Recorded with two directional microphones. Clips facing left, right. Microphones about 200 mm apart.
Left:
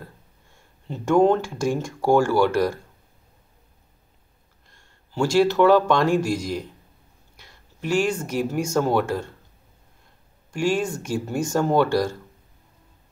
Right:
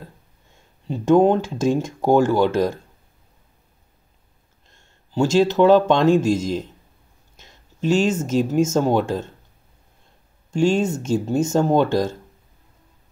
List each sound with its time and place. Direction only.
0.8 s speech: 15° right (ahead or behind)
4.6 s speech: 20° right (ahead or behind)
10.5 s speech: 25° right (ahead or behind)